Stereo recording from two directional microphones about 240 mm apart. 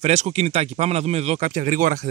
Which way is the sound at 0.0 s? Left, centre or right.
Right.